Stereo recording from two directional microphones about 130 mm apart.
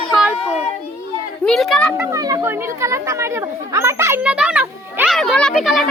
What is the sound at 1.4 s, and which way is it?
Speech, centre (ahead or behind).